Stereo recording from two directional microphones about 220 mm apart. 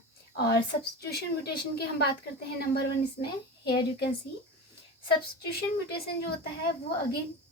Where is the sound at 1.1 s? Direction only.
45° left (ahead or behind).